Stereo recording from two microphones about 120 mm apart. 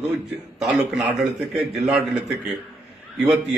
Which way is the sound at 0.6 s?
Centre (ahead or behind).